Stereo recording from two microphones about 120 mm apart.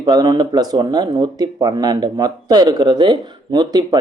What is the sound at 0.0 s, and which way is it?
Speech, 35° right (ahead or behind).